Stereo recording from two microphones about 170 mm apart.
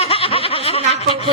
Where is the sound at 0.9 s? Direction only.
35° left (ahead or behind).